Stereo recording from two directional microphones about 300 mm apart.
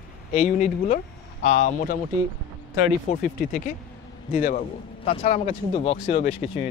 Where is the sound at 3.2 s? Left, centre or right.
Left.